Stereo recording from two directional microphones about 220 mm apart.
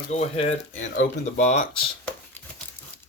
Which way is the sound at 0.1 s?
30° left (ahead or behind).